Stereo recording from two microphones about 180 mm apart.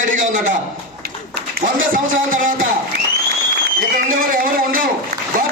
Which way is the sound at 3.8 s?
50° right (ahead or behind).